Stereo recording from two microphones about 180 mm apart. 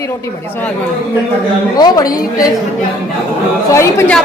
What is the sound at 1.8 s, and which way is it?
Speech, 20° left (ahead or behind).